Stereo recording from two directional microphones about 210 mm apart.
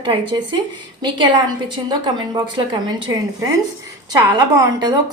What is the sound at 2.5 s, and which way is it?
A woman's voice, 20° right (ahead or behind).